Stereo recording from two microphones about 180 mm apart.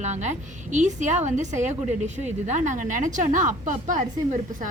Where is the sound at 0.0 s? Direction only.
40° right (ahead or behind).